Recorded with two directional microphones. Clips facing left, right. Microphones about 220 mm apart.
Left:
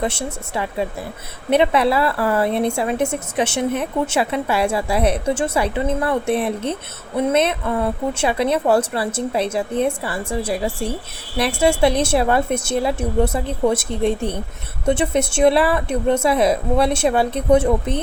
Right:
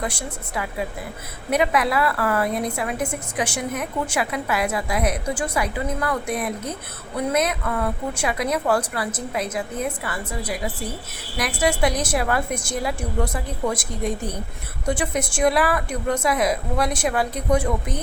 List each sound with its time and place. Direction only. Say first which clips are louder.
0.0 s a woman's voice: left 5 dB; 25° left (ahead or behind)